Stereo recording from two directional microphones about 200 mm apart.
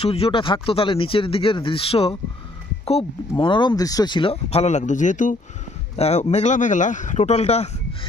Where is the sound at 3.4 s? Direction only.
25° left (ahead or behind).